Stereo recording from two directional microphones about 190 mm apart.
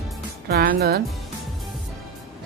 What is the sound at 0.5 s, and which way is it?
Speech, 55° right (ahead or behind).